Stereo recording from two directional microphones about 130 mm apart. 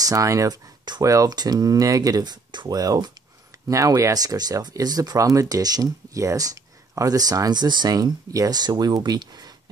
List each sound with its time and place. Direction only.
0.0 s speech: 25° right (ahead or behind)